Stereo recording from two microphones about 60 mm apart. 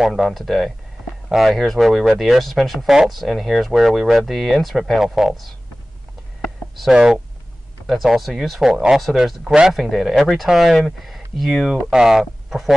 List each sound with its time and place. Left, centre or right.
0.0 s speech: centre
6.9 s speech: centre
7.8 s speech: centre
11.7 s speech: centre